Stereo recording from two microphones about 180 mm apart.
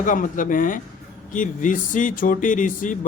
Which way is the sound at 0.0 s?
45° left (ahead or behind).